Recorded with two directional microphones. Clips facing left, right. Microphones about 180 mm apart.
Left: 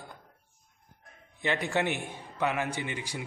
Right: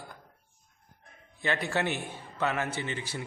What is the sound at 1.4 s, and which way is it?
A man's voice, 15° left (ahead or behind).